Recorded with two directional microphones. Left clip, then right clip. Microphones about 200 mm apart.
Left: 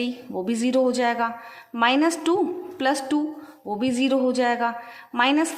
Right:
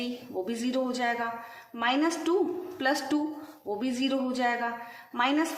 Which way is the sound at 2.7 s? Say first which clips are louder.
Left 5 dB; 30° left (ahead or behind).